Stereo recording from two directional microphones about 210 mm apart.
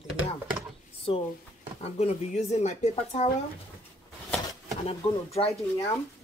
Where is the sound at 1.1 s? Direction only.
25° left (ahead or behind).